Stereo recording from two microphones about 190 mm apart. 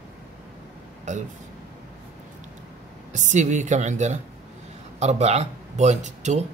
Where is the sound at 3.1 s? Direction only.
40° right (ahead or behind).